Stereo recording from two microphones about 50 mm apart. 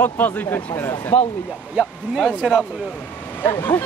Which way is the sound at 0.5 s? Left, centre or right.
Left.